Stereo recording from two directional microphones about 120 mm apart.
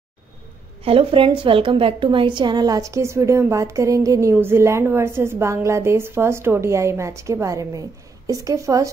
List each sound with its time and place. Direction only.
0.8 s a woman's voice: 50° right (ahead or behind); by 8.8 s 30° right (ahead or behind)